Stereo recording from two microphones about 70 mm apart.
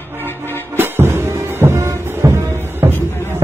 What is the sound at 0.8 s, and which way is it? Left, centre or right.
Music, right.